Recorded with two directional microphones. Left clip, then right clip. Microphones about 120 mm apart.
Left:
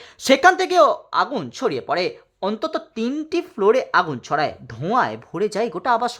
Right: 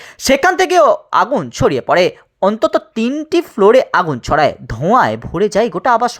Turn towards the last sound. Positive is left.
turn(degrees=-35)  # may be behind; listen again after turning